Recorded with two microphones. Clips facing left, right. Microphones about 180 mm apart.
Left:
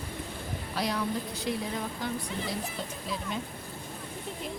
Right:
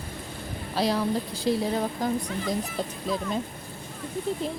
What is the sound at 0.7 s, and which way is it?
A woman's voice, 30° right (ahead or behind).